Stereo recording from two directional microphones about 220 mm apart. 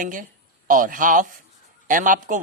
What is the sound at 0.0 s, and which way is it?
Speech, 35° right (ahead or behind).